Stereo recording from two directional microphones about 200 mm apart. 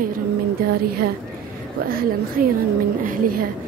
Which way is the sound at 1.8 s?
45° right (ahead or behind).